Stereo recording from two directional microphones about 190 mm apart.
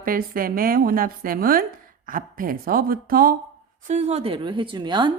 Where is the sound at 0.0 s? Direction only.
50° right (ahead or behind).